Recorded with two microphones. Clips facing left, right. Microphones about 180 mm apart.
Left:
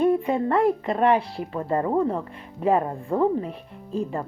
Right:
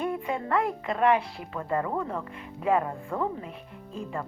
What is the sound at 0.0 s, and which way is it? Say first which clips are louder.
Speech: left 9 dB; 35° left (ahead or behind).